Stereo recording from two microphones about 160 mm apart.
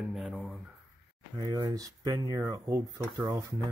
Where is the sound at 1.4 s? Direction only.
20° right (ahead or behind).